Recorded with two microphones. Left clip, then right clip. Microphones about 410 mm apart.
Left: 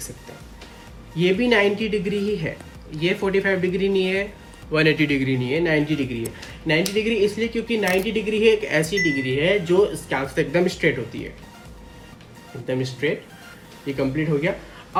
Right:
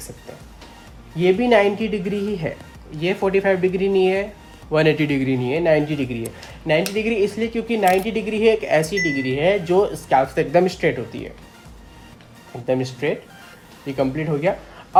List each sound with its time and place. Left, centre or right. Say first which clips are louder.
1.1 s speech: right 3 dB; centre
12.6 s speech: right 3 dB; centre